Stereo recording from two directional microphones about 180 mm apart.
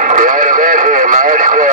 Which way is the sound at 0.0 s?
45° right (ahead or behind).